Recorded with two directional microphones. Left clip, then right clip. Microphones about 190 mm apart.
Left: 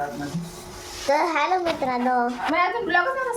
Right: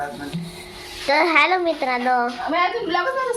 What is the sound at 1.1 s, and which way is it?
Speech, 20° right (ahead or behind).